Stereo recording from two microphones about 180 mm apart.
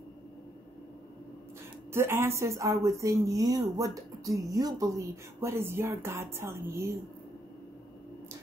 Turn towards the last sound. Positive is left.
turn(degrees=-15)  # may be behind; listen again after turning